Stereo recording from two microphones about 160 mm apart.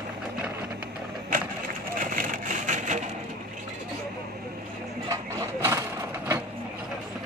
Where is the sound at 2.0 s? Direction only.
55° right (ahead or behind).